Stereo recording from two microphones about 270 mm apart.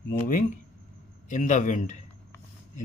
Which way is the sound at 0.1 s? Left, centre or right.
Left.